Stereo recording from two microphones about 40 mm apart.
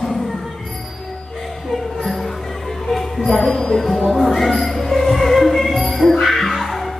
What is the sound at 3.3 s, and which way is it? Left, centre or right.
Music, centre.